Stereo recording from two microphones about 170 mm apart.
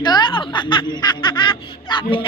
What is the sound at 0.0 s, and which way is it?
Speech, 25° left (ahead or behind).